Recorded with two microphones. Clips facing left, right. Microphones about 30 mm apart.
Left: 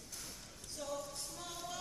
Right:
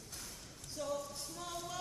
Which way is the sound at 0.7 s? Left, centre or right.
Centre.